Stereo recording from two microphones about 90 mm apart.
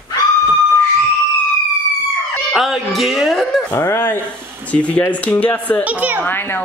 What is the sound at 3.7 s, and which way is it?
Speech, 40° left (ahead or behind).